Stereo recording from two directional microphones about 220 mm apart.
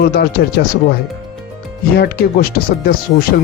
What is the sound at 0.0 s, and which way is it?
Speech, 45° left (ahead or behind).